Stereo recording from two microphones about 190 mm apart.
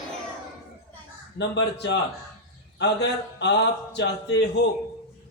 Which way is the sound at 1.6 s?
65° left (ahead or behind).